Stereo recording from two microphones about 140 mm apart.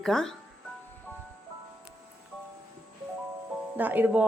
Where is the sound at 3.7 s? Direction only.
15° right (ahead or behind).